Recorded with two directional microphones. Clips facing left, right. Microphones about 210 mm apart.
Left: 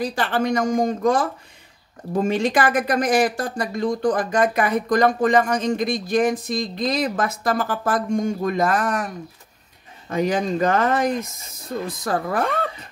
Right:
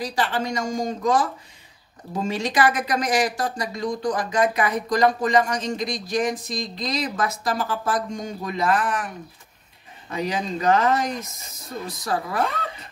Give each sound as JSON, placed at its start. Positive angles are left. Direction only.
{"t": 0.0, "sound": "speech", "side_deg": 55}
{"t": 10.1, "sound": "speech", "side_deg": 50}